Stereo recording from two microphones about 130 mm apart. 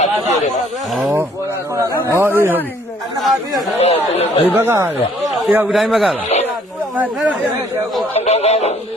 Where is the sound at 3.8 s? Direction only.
55° left (ahead or behind).